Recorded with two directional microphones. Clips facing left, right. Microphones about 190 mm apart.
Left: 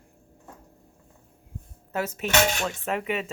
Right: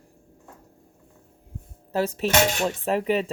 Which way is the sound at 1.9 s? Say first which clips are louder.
Right 3 dB; 30° right (ahead or behind).